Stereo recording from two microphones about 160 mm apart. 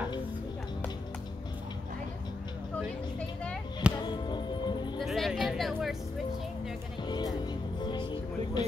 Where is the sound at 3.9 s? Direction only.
30° left (ahead or behind).